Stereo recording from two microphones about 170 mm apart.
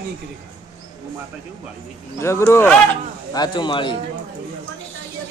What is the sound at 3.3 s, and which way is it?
Speech, 25° left (ahead or behind).